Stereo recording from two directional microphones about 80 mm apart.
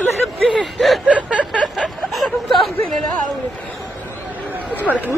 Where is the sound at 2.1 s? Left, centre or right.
Centre.